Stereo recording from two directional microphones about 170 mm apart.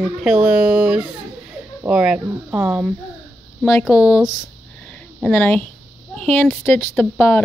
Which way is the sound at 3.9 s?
20° left (ahead or behind).